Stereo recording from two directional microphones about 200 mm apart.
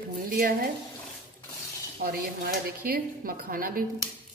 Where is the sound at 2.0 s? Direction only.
50° right (ahead or behind).